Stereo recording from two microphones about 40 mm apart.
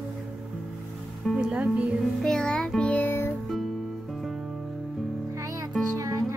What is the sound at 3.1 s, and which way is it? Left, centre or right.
Music, left.